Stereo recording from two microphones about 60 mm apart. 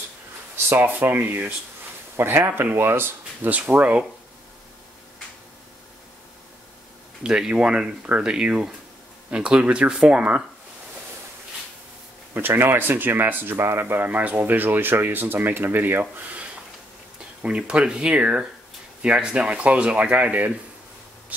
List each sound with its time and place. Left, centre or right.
0.7 s speech: right
3.4 s speech: right
7.2 s speech: centre
12.4 s speech: right